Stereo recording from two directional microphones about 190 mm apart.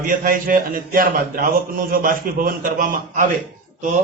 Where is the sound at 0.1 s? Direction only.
45° right (ahead or behind).